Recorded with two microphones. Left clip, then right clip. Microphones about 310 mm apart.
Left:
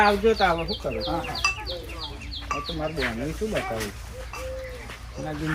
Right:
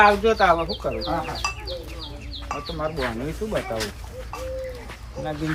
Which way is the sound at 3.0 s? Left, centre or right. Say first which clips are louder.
Even; centre.